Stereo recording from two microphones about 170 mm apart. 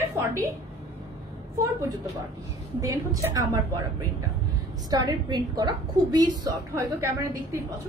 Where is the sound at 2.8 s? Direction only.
20° right (ahead or behind).